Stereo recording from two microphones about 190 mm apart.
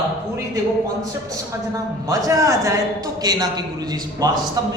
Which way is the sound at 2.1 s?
15° right (ahead or behind).